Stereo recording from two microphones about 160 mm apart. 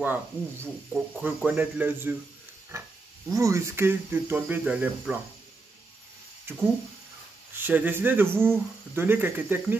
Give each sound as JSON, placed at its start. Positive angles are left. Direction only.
{"t": 0.0, "sound": "speech", "side_deg": -10}
{"t": 2.7, "sound": "a sound", "side_deg": -20}
{"t": 3.3, "sound": "speech", "side_deg": -20}
{"t": 6.5, "sound": "speech", "side_deg": -15}